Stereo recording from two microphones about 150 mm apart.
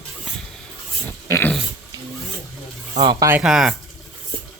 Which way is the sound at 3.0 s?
30° right (ahead or behind).